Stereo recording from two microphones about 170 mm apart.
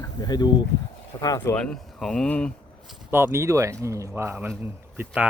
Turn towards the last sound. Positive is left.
turn(degrees=-5)  # may be behind; listen again after turning